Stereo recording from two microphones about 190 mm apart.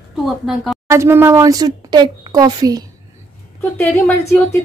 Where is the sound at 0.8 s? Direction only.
15° right (ahead or behind).